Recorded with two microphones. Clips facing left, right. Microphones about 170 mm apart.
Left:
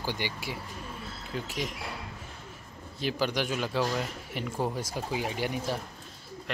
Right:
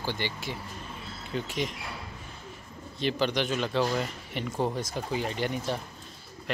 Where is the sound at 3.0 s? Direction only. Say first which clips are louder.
Right 2 dB; 5° left (ahead or behind).